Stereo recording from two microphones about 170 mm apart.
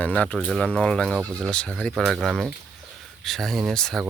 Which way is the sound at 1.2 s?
10° right (ahead or behind).